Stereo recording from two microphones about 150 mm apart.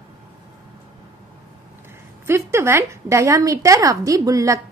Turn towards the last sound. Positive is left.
turn(degrees=-20)  # may be behind; listen again after turning